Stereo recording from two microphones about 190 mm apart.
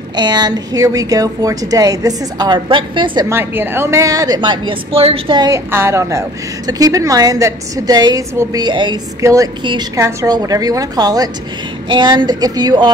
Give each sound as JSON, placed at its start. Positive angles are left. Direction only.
{"t": 0.1, "sound": "a woman's voice", "side_deg": -20}
{"t": 3.3, "sound": "a woman's voice", "side_deg": -10}
{"t": 5.7, "sound": "a woman's voice", "side_deg": -15}